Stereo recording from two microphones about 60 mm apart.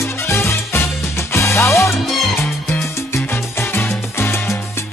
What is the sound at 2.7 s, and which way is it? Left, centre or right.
Salsa music, left.